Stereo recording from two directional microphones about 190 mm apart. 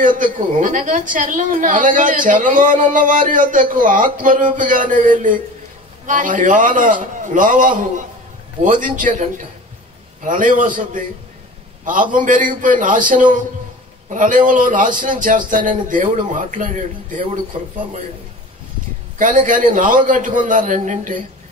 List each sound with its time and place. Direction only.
0.0 s a woman's voice: 45° right (ahead or behind)
10.2 s a woman's voice: 45° right (ahead or behind)
19.1 s a woman's voice: 40° right (ahead or behind)